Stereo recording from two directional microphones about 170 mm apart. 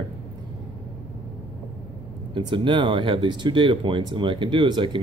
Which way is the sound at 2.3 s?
30° right (ahead or behind).